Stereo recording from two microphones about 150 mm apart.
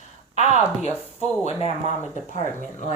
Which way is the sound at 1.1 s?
45° left (ahead or behind).